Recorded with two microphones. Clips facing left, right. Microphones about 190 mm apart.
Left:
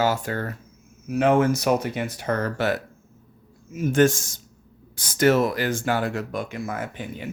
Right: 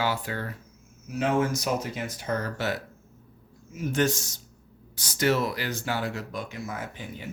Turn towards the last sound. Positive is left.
turn(degrees=55)  # may be behind; listen again after turning